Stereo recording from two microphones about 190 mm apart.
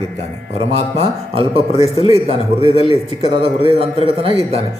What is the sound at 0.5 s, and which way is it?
A man's voice, 35° right (ahead or behind).